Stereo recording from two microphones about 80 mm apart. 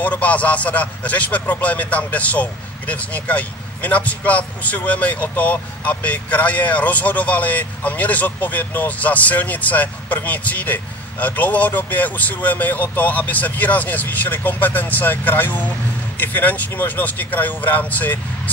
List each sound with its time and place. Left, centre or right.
0.0 s a man's voice: centre